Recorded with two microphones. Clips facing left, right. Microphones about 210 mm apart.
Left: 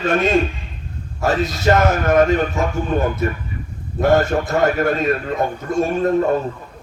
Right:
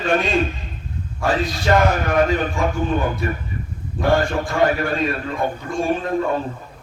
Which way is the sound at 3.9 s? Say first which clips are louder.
Left 3 dB; 40° left (ahead or behind).